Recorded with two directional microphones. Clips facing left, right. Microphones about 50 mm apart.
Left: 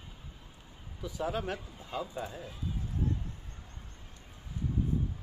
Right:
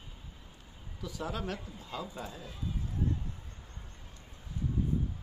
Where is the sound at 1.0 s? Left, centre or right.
Left.